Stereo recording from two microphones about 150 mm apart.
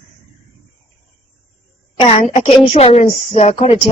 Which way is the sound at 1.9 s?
40° left (ahead or behind).